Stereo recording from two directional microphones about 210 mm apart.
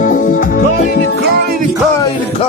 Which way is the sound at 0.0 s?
40° left (ahead or behind).